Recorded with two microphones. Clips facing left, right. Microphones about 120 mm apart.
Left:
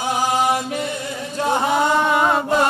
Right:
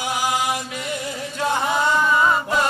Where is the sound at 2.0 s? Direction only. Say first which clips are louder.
Left 1 dB; 65° left (ahead or behind).